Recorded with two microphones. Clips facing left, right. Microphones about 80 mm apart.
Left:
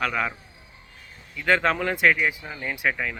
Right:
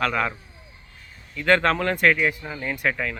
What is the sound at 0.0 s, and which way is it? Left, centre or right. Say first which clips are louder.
Speech: right 2 dB; centre.